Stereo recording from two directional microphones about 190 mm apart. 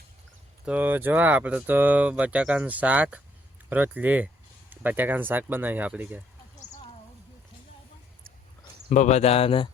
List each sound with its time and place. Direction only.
0.6 s speech: 10° right (ahead or behind)
8.9 s speech: 40° left (ahead or behind)